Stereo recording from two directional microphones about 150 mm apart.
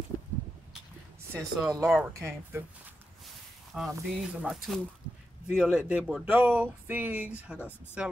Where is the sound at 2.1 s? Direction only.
15° right (ahead or behind).